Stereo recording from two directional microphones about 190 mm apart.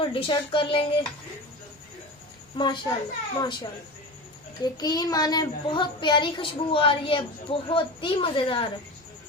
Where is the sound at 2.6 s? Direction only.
25° left (ahead or behind).